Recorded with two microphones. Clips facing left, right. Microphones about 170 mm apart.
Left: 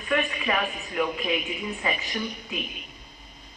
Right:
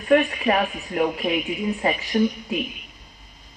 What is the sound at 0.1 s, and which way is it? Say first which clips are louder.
Speech: right 8 dB; 50° right (ahead or behind).